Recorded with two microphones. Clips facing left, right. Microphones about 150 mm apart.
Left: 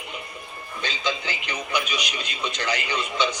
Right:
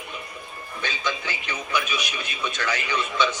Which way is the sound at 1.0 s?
20° left (ahead or behind).